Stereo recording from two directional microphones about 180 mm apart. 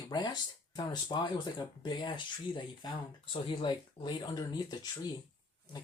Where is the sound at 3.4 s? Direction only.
25° left (ahead or behind).